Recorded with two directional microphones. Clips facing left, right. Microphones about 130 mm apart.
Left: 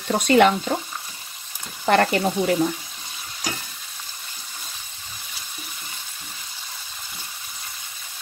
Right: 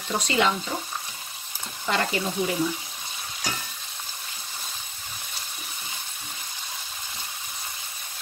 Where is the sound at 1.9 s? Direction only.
60° left (ahead or behind).